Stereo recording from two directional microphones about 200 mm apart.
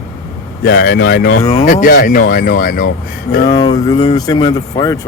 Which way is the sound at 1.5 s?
35° left (ahead or behind).